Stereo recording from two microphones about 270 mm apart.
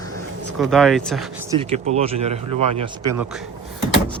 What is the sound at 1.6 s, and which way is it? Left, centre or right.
Speech, right.